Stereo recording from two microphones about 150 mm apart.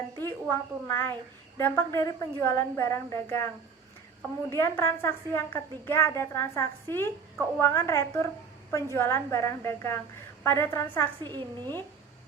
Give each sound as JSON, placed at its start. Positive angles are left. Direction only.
{"t": 0.2, "sound": "a woman's voice", "side_deg": 15}
{"t": 11.2, "sound": "a woman's voice", "side_deg": -30}